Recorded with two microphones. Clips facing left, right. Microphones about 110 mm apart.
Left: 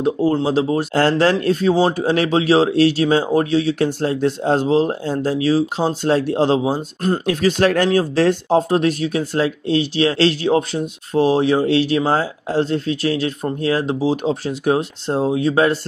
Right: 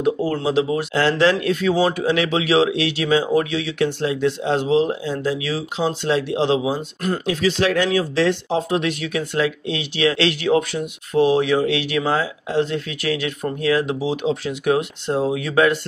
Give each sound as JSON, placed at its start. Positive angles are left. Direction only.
{"t": 0.0, "sound": "speech", "side_deg": 25}
{"t": 7.2, "sound": "speech", "side_deg": 50}